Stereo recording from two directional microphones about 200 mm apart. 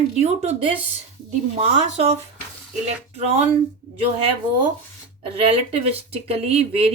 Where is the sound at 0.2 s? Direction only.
35° right (ahead or behind).